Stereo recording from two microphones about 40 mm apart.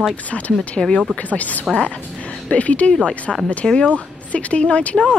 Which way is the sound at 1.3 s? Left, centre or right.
Left.